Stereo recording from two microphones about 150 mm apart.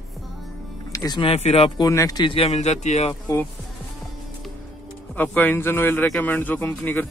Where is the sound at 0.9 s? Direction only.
30° left (ahead or behind).